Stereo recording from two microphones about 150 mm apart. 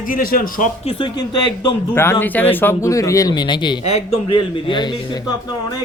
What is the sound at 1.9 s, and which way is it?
Speech, 15° left (ahead or behind).